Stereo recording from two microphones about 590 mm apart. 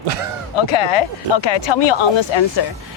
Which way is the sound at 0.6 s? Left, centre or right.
Left.